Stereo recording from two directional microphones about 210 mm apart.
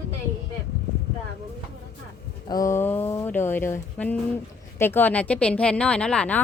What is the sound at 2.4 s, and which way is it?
Speech, 15° left (ahead or behind).